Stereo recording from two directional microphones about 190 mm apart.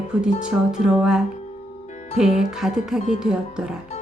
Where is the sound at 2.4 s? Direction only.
Centre (ahead or behind).